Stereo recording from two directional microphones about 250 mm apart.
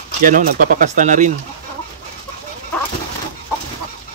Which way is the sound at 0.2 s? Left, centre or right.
Right.